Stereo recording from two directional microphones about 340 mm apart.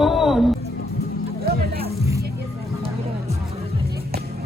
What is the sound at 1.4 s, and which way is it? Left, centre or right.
Music, right.